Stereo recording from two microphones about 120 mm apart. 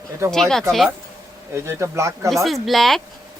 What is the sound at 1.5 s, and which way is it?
Speech, 25° right (ahead or behind).